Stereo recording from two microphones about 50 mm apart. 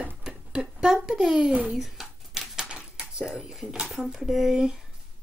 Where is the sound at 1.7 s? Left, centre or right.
Centre.